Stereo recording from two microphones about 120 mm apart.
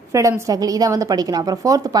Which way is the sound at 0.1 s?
25° right (ahead or behind).